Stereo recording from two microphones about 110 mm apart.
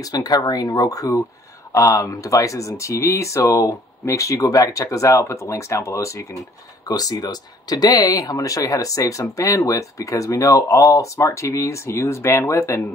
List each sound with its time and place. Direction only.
0.0 s speech: 35° left (ahead or behind)